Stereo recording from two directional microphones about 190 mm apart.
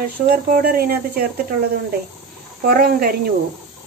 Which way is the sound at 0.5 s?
50° right (ahead or behind).